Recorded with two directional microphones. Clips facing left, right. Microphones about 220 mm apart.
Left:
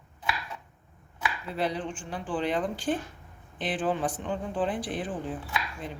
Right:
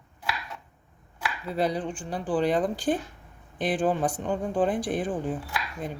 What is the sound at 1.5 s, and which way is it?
Speech, 40° right (ahead or behind).